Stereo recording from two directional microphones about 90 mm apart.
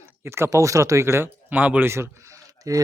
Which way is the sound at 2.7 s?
40° right (ahead or behind).